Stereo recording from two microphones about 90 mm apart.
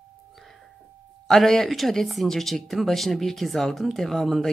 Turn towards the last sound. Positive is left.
turn(degrees=0)  # may be behind; listen again after turning